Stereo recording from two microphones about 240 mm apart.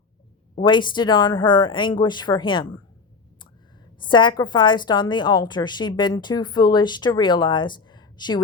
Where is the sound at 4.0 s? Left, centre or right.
Centre.